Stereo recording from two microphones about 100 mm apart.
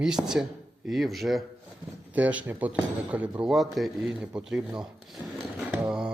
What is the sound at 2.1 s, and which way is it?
Speech, 15° right (ahead or behind).